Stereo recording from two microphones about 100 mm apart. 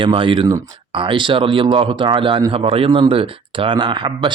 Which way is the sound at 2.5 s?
70° right (ahead or behind).